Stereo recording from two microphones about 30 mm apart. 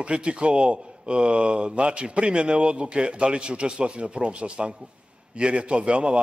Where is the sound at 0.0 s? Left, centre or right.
Right.